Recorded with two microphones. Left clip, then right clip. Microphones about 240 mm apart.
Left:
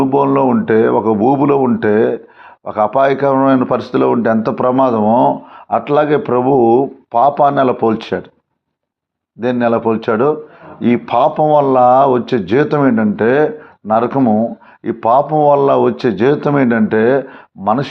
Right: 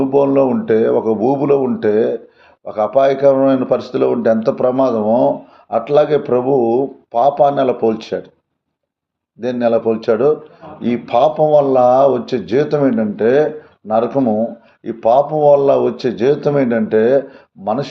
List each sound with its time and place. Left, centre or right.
0.0 s speech: left
9.4 s speech: left